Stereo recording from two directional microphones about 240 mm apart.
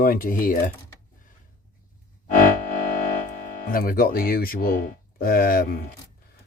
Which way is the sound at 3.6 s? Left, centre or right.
Left.